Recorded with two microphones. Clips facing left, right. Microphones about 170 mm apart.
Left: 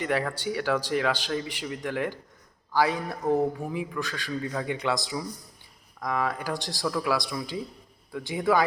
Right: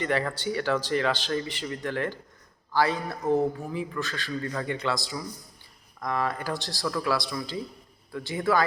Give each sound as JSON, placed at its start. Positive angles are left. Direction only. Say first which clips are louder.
{"t": 0.0, "sound": "speech", "louder": "even", "side_deg": 10}